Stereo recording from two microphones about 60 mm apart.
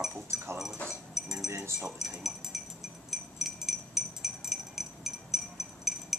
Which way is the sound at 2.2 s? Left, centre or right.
Centre.